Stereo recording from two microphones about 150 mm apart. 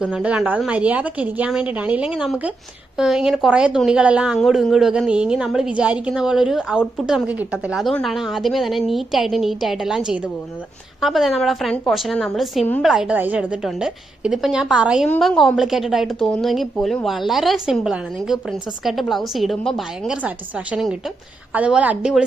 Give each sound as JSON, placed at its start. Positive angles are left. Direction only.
{"t": 0.0, "sound": "a woman's voice", "side_deg": -5}
{"t": 11.0, "sound": "a woman's voice", "side_deg": 0}
{"t": 15.0, "sound": "a woman's voice", "side_deg": 5}